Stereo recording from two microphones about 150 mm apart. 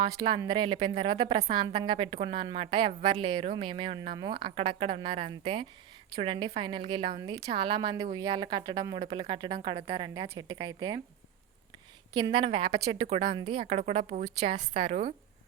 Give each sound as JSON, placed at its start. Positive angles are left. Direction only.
{"t": 0.0, "sound": "a woman's voice", "side_deg": -30}
{"t": 12.1, "sound": "a woman's voice", "side_deg": -35}
{"t": 14.0, "sound": "a woman's voice", "side_deg": -60}
{"t": 14.3, "sound": "a woman's voice", "side_deg": -40}